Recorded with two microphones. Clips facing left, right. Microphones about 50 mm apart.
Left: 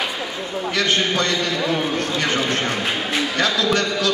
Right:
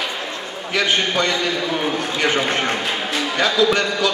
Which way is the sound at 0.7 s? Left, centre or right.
Centre.